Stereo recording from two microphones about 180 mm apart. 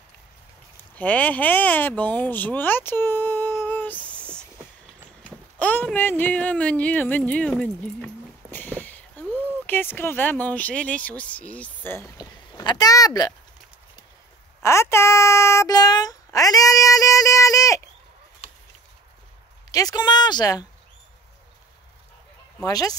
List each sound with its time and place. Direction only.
0.9 s speech: 10° left (ahead or behind)
3.6 s a sound: 10° left (ahead or behind)
5.6 s a sound: 10° left (ahead or behind)
9.5 s speech: 10° left (ahead or behind)
14.6 s speech: 15° left (ahead or behind)
19.7 s speech: 20° left (ahead or behind)
22.6 s speech: 20° left (ahead or behind)